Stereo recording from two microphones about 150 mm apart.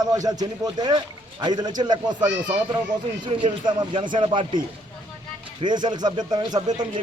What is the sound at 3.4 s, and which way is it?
A man's voice, 35° right (ahead or behind).